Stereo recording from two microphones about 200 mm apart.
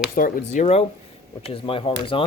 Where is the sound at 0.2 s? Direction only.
45° left (ahead or behind).